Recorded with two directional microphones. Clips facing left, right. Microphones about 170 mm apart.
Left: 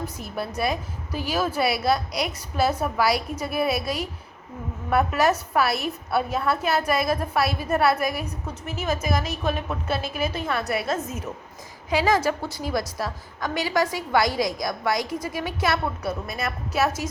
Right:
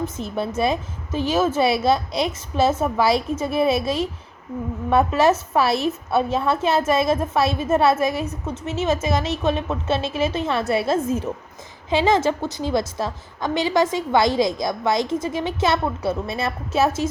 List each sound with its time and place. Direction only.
0.0 s a woman's voice: 25° right (ahead or behind)